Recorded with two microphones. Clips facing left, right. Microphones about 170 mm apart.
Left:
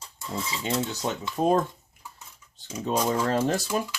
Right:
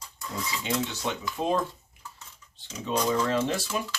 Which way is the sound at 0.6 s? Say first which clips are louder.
Left 2 dB; 40° left (ahead or behind).